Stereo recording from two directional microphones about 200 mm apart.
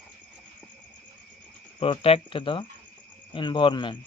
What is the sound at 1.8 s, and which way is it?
Speech, 25° left (ahead or behind).